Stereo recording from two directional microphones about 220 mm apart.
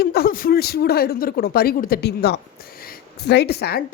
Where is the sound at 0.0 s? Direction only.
45° left (ahead or behind).